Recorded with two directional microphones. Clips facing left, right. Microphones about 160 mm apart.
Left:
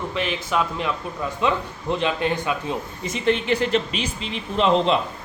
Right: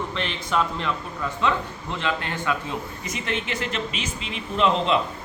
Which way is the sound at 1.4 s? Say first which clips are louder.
Left 2 dB; 15° left (ahead or behind).